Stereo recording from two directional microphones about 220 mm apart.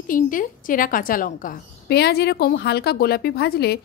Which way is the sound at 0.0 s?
40° left (ahead or behind).